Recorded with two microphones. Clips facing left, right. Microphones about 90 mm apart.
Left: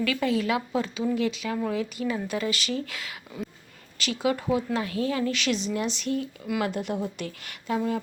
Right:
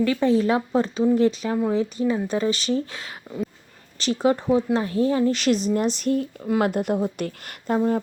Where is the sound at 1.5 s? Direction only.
25° right (ahead or behind); by 6.2 s 45° right (ahead or behind).